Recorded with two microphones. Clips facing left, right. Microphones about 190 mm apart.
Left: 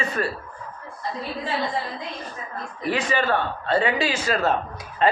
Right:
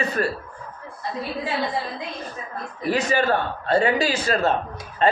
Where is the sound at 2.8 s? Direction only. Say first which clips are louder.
Right 2 dB; 40° right (ahead or behind).